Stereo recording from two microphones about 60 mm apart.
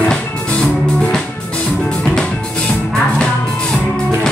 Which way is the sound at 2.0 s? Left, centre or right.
Centre.